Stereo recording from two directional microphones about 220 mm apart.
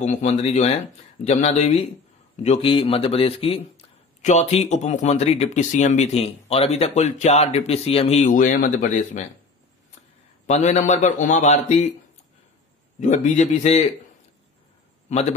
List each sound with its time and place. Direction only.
0.0 s speech: 30° left (ahead or behind)
10.4 s a man's voice: 30° left (ahead or behind)
13.0 s a man's voice: 35° left (ahead or behind)